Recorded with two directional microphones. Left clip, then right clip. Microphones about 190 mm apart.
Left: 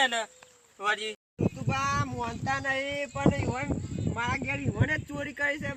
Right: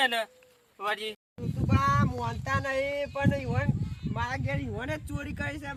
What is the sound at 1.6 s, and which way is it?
Child singing, 10° right (ahead or behind).